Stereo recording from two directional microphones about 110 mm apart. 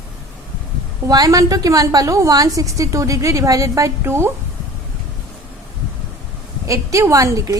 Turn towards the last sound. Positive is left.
turn(degrees=-30)  # may be behind; listen again after turning